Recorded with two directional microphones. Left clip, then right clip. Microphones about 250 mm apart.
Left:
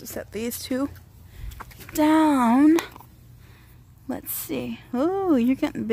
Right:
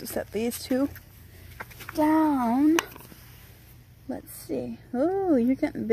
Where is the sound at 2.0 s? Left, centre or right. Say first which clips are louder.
Left 5 dB; left.